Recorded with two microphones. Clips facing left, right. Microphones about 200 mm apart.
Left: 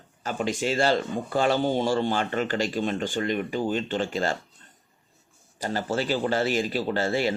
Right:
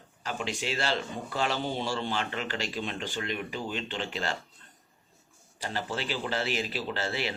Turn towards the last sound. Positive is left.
turn(degrees=45)  # may be behind; listen again after turning